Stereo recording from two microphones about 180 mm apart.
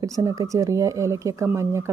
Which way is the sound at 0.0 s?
20° right (ahead or behind).